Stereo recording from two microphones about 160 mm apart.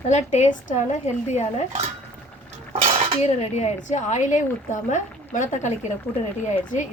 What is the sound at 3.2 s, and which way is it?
Speech, 40° left (ahead or behind).